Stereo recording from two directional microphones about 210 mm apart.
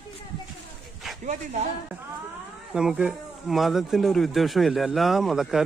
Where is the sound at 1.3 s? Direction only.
35° right (ahead or behind).